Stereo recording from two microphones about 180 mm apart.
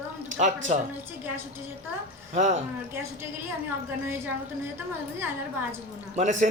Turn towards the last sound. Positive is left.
turn(degrees=-45)  # may be behind; listen again after turning